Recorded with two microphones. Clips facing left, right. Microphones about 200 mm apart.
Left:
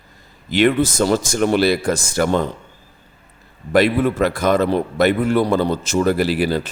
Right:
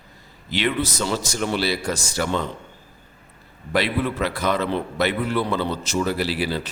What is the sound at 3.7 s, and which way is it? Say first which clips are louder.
A man's voice: left 7 dB; 45° left (ahead or behind).